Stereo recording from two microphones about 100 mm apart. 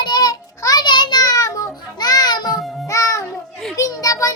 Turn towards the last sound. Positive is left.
turn(degrees=35)  # may be behind; listen again after turning